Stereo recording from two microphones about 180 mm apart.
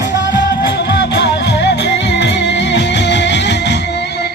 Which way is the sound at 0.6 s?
65° left (ahead or behind).